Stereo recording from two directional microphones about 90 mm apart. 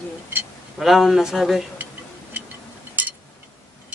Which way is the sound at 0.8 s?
5° right (ahead or behind).